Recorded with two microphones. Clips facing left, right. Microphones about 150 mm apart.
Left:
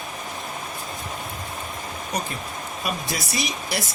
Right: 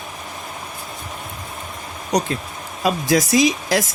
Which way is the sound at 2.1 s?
90° right.